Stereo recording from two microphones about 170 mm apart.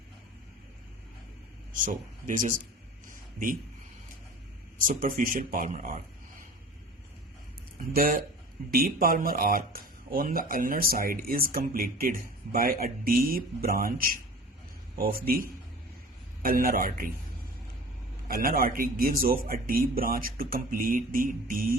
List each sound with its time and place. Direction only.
1.7 s speech: 50° right (ahead or behind)
4.9 s speech: 55° right (ahead or behind)
7.9 s speech: 60° right (ahead or behind)
18.3 s speech: 60° right (ahead or behind)